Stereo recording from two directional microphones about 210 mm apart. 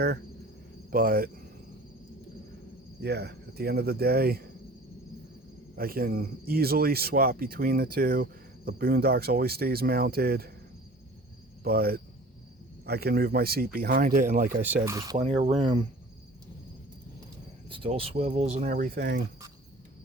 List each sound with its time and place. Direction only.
0.9 s speech: 45° right (ahead or behind)
3.0 s speech: 50° right (ahead or behind)
5.7 s speech: 45° right (ahead or behind)
11.6 s speech: 45° right (ahead or behind)
14.8 s speech: 15° right (ahead or behind)
15.2 s speech: 30° right (ahead or behind)
17.7 s speech: 25° right (ahead or behind); by 19.2 s 50° right (ahead or behind)